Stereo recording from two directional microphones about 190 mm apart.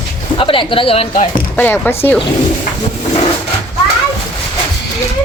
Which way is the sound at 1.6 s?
10° left (ahead or behind).